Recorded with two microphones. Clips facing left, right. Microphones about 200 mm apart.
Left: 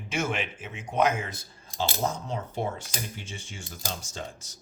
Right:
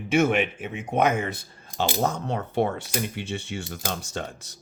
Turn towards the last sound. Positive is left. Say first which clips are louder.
# right 5 dB
turn(degrees=-65)  # may be behind; listen again after turning